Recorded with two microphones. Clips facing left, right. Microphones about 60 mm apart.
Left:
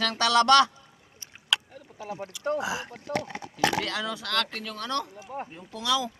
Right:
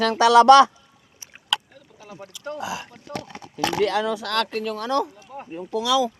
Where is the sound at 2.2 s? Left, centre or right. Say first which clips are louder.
Left 2 dB; left.